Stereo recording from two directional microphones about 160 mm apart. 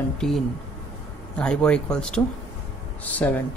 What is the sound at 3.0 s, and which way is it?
Speech, 10° left (ahead or behind).